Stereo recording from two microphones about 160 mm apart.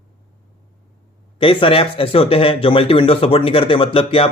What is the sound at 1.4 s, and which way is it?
Speech, 35° left (ahead or behind).